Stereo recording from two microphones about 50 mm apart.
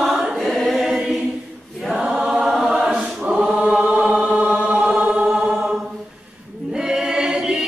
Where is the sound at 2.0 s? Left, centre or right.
Right.